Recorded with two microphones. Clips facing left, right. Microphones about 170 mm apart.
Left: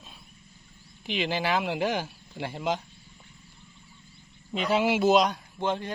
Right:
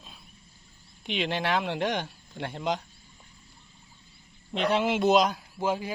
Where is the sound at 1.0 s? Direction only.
Centre (ahead or behind).